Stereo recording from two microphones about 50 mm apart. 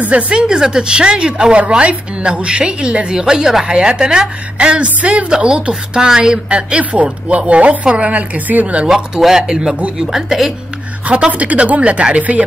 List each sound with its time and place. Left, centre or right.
0.0 s a woman's voice: right
8.8 s speech: centre
11.1 s a woman's voice: right